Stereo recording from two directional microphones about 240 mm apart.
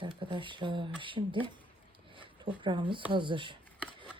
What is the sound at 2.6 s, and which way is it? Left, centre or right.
Speech, centre.